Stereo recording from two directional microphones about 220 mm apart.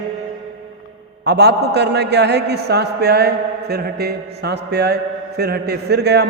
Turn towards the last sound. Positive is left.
turn(degrees=-50)  # may be behind; listen again after turning